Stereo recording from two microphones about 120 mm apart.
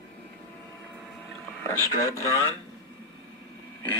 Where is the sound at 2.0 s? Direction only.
25° left (ahead or behind).